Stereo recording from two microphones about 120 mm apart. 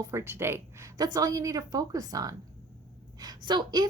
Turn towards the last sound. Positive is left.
turn(degrees=-35)  # may be behind; listen again after turning